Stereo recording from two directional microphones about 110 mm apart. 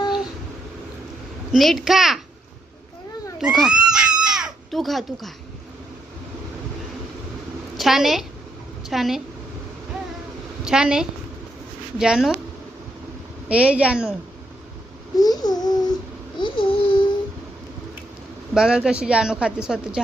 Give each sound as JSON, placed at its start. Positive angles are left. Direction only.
{"t": 1.5, "sound": "a child's voice", "side_deg": 0}
{"t": 3.4, "sound": "speech", "side_deg": -5}
{"t": 7.8, "sound": "a woman's voice", "side_deg": 0}
{"t": 10.6, "sound": "a woman's voice", "side_deg": -5}
{"t": 13.5, "sound": "a woman's voice", "side_deg": -10}
{"t": 15.1, "sound": "speech", "side_deg": 35}
{"t": 16.4, "sound": "babbling", "side_deg": 55}
{"t": 18.5, "sound": "a woman's voice", "side_deg": -5}